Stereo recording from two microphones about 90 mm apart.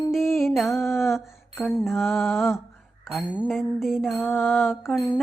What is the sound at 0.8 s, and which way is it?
Mantra, 30° left (ahead or behind).